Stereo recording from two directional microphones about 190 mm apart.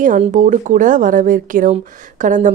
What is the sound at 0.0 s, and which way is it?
Speech, 40° right (ahead or behind).